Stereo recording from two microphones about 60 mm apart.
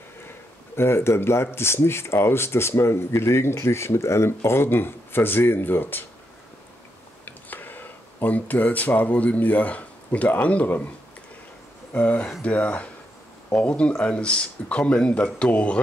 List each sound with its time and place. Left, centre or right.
0.7 s speech: left
7.2 s speech: left
11.9 s speech: left